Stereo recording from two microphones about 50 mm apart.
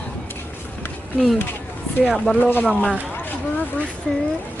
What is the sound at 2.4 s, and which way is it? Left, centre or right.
Speech, left.